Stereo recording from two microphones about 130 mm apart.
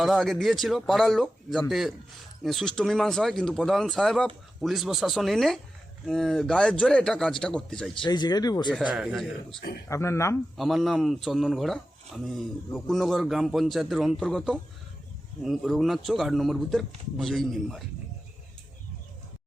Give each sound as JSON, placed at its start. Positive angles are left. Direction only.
{"t": 0.0, "sound": "speech", "side_deg": 0}
{"t": 8.0, "sound": "speech", "side_deg": 35}
{"t": 8.8, "sound": "speech", "side_deg": -5}
{"t": 9.9, "sound": "speech", "side_deg": 20}
{"t": 10.6, "sound": "speech", "side_deg": 0}